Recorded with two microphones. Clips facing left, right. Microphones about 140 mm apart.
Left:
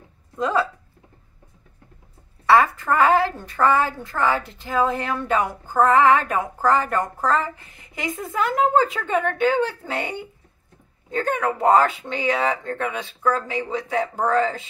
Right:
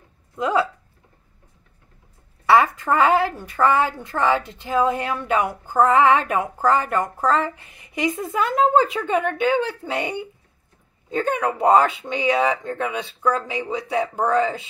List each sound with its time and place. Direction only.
0.4 s a woman's voice: 15° right (ahead or behind)
2.5 s a woman's voice: 15° right (ahead or behind)